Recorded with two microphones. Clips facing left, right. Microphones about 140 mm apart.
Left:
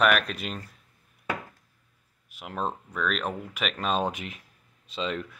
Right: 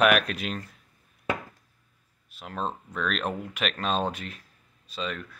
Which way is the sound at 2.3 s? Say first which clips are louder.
Left 1 dB; 15° left (ahead or behind).